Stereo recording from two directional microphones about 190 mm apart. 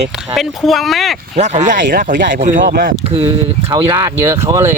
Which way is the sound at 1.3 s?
35° right (ahead or behind).